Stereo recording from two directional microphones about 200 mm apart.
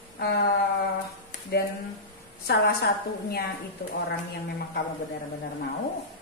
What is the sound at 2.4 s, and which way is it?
A woman's voice, 55° left (ahead or behind).